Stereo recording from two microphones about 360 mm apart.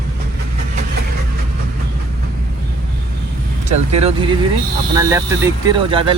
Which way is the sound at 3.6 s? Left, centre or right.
Centre.